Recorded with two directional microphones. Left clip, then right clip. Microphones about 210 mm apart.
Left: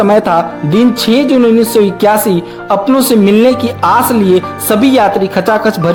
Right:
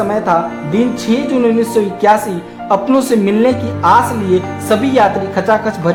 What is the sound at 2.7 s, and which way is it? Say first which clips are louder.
Speech: left 3 dB; 30° left (ahead or behind).